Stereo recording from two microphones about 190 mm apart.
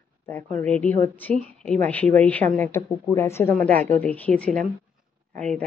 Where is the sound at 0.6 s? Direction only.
5° left (ahead or behind).